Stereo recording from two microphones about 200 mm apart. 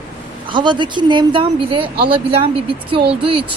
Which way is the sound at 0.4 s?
25° right (ahead or behind).